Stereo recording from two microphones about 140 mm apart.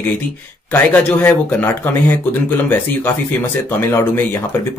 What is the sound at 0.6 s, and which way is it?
Speech, 15° left (ahead or behind).